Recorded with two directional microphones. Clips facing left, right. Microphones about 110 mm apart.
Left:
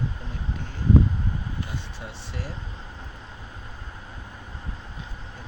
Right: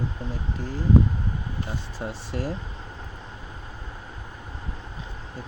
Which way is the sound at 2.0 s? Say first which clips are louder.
Right 6 dB; 45° right (ahead or behind).